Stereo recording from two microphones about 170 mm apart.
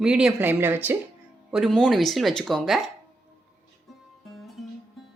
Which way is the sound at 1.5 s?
Centre (ahead or behind).